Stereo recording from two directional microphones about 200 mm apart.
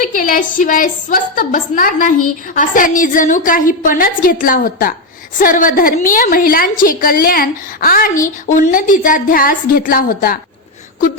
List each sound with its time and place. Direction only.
0.0 s a woman's voice: 40° left (ahead or behind)